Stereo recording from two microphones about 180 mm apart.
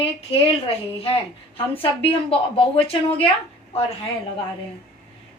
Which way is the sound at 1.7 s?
30° left (ahead or behind).